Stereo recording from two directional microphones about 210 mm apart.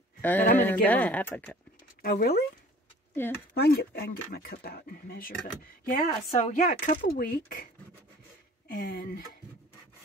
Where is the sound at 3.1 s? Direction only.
10° left (ahead or behind).